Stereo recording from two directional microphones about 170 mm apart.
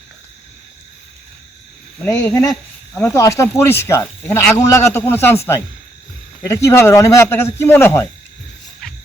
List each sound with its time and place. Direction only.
2.0 s speech: 15° left (ahead or behind)
8.8 s cricket: centre (ahead or behind)